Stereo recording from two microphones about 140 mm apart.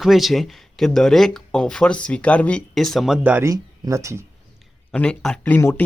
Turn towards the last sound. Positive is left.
turn(degrees=20)  # may be behind; listen again after turning